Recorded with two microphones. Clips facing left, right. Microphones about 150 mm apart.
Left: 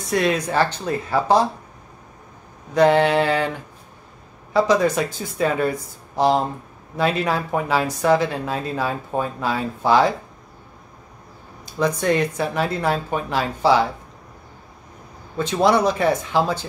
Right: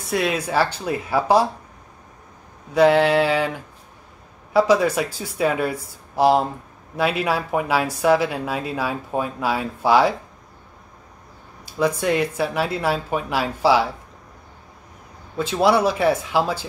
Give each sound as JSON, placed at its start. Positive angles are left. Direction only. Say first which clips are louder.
{"t": 0.1, "sound": "speech", "louder": "left 1 dB", "side_deg": -5}
{"t": 2.7, "sound": "a sound", "louder": "even", "side_deg": -5}
{"t": 4.6, "sound": "speech", "louder": "right 1 dB", "side_deg": -5}
{"t": 11.6, "sound": "speech", "louder": "even", "side_deg": -5}
{"t": 15.3, "sound": "speech", "louder": "even", "side_deg": -5}